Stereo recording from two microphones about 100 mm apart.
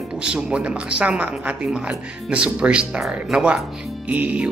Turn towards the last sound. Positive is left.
turn(degrees=-15)  # may be behind; listen again after turning